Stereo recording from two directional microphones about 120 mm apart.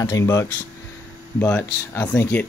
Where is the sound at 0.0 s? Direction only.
25° left (ahead or behind).